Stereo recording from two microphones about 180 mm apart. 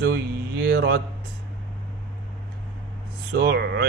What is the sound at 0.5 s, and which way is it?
Speech, 60° right (ahead or behind).